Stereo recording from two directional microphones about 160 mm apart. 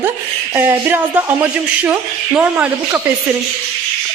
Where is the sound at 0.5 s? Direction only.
15° right (ahead or behind).